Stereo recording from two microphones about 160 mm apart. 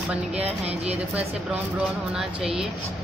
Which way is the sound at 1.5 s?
5° right (ahead or behind).